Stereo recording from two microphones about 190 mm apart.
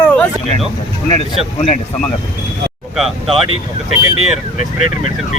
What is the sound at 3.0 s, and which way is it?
Speech, centre (ahead or behind).